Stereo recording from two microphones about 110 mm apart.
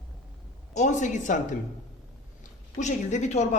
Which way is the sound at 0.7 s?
90° left.